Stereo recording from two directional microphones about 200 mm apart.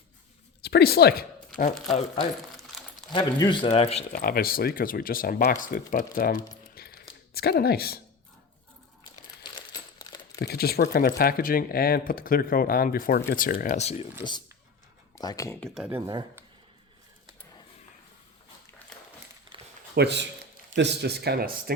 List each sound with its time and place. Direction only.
0.6 s speech: 55° left (ahead or behind)
2.1 s crumpling: centre (ahead or behind)
3.1 s speech: 20° left (ahead or behind)
4.1 s speech: 50° left (ahead or behind)
6.8 s biting: 50° left (ahead or behind)
7.3 s speech: 50° left (ahead or behind)
9.4 s crumpling: 25° left (ahead or behind)
10.4 s speech: 50° left (ahead or behind); by 14.1 s 35° left (ahead or behind)
15.1 s speech: 20° left (ahead or behind)
15.6 s speech: 5° right (ahead or behind)
20.0 s a man's voice: 55° right (ahead or behind)